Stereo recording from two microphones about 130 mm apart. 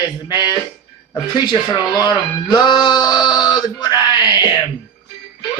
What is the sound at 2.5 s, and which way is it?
Speech, 35° left (ahead or behind).